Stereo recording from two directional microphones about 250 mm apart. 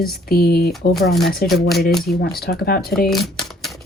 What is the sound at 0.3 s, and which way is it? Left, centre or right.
Speech, left.